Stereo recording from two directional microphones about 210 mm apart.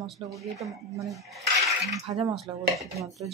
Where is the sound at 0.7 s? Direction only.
15° right (ahead or behind).